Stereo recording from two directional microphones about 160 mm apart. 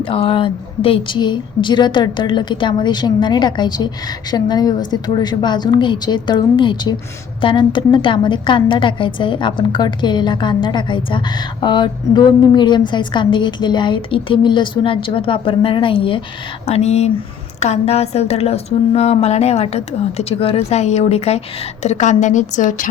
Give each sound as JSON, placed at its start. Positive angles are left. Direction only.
{"t": 0.0, "sound": "a woman's voice", "side_deg": 35}